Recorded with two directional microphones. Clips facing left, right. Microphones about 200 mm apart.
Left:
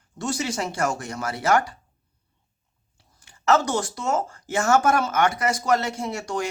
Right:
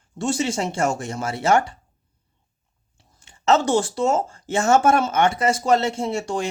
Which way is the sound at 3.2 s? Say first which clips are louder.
Right 2 dB; 25° right (ahead or behind).